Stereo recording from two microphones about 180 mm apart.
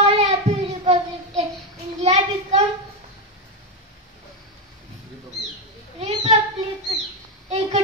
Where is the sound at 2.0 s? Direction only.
40° right (ahead or behind).